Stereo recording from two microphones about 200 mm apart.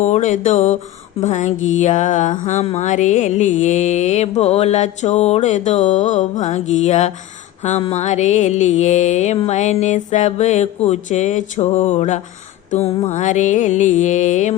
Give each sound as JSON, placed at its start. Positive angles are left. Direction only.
{"t": 0.0, "sound": "mantra", "side_deg": 35}